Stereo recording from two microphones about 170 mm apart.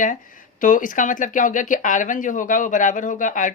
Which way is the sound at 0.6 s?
50° left (ahead or behind).